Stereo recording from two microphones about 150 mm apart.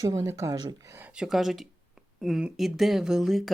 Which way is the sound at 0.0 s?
25° right (ahead or behind).